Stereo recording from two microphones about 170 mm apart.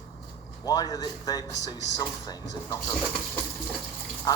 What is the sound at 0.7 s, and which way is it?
Speech, 25° left (ahead or behind).